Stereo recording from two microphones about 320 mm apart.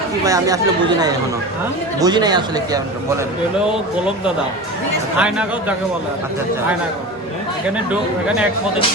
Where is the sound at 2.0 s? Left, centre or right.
Centre.